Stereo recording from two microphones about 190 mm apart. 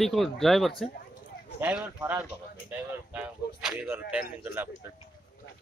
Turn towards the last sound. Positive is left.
turn(degrees=-10)  # may be behind; listen again after turning